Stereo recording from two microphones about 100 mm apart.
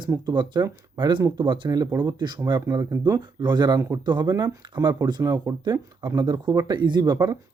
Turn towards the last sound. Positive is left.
turn(degrees=-45)  # may be behind; listen again after turning